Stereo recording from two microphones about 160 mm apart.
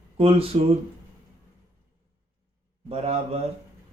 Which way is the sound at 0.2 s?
35° right (ahead or behind).